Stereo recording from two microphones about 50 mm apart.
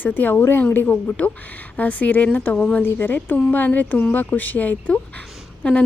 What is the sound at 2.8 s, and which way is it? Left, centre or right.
Speech, left.